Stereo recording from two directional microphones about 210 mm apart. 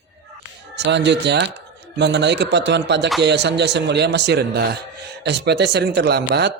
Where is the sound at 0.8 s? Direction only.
55° right (ahead or behind).